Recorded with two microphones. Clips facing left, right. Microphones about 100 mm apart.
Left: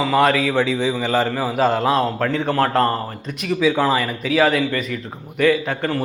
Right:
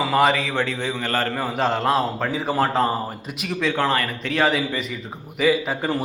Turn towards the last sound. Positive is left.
turn(degrees=-5)  # may be behind; listen again after turning